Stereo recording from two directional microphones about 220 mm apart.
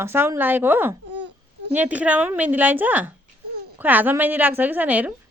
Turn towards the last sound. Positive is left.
turn(degrees=-5)  # may be behind; listen again after turning